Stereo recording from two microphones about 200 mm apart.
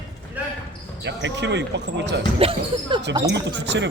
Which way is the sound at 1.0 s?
60° right (ahead or behind).